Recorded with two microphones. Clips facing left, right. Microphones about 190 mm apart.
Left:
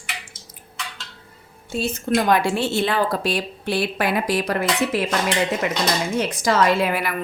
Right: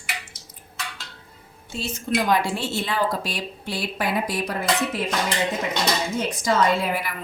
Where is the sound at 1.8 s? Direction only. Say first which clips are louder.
Left 4 dB; 60° left (ahead or behind); by 5.0 s 85° left.